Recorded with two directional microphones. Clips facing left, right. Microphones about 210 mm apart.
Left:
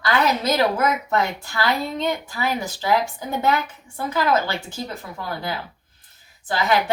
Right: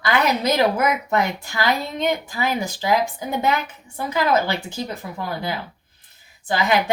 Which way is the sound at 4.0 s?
15° right (ahead or behind).